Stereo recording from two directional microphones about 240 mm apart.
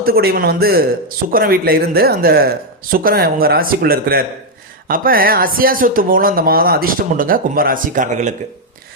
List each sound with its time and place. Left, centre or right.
0.0 s a man's voice: right